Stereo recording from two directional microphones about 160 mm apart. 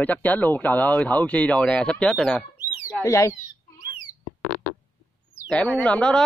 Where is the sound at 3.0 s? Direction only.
15° left (ahead or behind).